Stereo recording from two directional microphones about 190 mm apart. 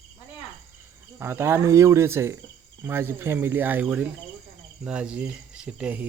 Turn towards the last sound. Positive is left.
turn(degrees=-5)  # may be behind; listen again after turning